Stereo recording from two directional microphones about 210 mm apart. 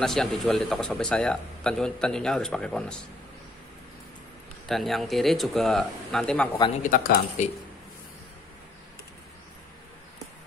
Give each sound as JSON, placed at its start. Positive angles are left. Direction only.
{"t": 0.0, "sound": "speech", "side_deg": 0}
{"t": 4.6, "sound": "speech", "side_deg": 0}
{"t": 6.8, "sound": "speech", "side_deg": 40}